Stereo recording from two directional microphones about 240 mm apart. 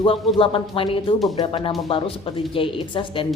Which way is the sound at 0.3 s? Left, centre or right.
Left.